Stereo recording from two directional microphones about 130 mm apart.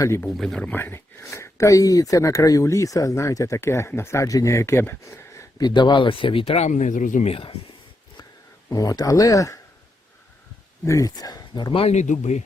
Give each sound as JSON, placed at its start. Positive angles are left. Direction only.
{"t": 0.3, "sound": "speech", "side_deg": 5}
{"t": 6.7, "sound": "speech", "side_deg": 70}
{"t": 7.3, "sound": "speech", "side_deg": 45}
{"t": 8.7, "sound": "speech", "side_deg": 30}
{"t": 10.8, "sound": "speech", "side_deg": 25}
{"t": 11.9, "sound": "speech", "side_deg": 70}